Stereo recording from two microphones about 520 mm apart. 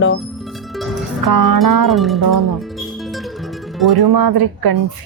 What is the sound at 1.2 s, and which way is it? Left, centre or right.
Speech, right.